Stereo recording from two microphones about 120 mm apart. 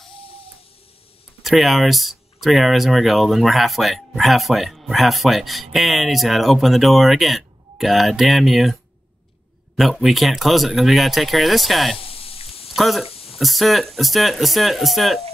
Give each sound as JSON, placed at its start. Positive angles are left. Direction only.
{"t": 1.4, "sound": "speech", "side_deg": 0}
{"t": 9.8, "sound": "speech", "side_deg": 0}
{"t": 12.0, "sound": "a sound", "side_deg": 50}
{"t": 12.7, "sound": "speech", "side_deg": 0}
{"t": 13.1, "sound": "a sound", "side_deg": 55}
{"t": 13.4, "sound": "speech", "side_deg": 0}